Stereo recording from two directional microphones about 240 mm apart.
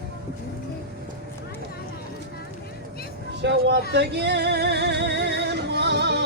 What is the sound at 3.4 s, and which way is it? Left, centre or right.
Music, right.